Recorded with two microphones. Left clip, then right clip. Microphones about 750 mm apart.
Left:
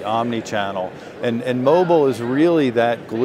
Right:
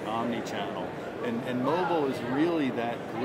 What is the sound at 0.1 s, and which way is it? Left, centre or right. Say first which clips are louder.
Speech: left 11 dB; left.